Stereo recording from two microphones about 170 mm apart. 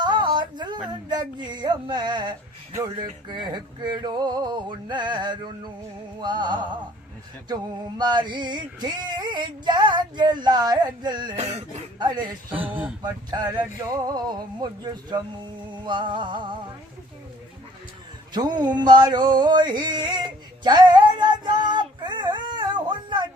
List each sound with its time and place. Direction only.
0.0 s a sound: 25° right (ahead or behind)
1.1 s male singing: 25° right (ahead or behind)
12.5 s speech: 10° right (ahead or behind)
13.0 s male singing: 25° right (ahead or behind)
18.3 s male singing: 25° right (ahead or behind)
20.7 s a sound: 25° right (ahead or behind)